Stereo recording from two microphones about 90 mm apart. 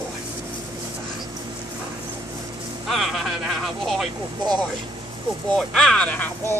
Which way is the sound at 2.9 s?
Centre (ahead or behind).